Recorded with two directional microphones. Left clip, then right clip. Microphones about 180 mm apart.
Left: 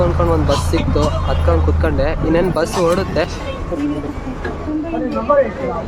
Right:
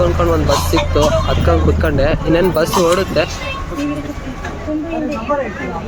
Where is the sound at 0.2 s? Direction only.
15° right (ahead or behind).